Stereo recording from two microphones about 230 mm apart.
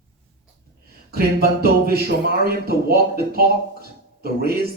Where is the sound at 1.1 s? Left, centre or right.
Right.